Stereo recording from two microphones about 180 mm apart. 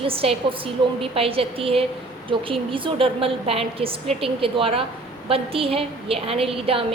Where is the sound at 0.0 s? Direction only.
30° right (ahead or behind).